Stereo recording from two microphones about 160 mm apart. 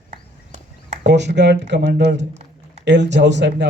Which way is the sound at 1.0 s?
90° right.